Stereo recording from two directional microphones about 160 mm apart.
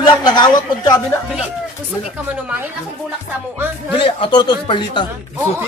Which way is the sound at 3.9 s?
30° left (ahead or behind).